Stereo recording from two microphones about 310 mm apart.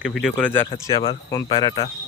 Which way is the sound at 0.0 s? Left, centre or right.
Centre.